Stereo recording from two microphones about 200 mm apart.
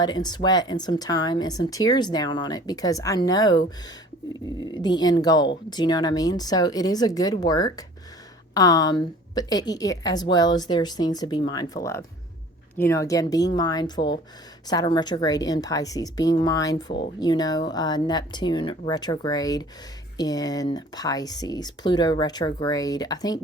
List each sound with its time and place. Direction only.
0.0 s speech: 20° left (ahead or behind)
4.6 s speech: 20° left (ahead or behind)